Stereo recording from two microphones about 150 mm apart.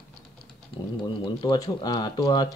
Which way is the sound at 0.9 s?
30° left (ahead or behind).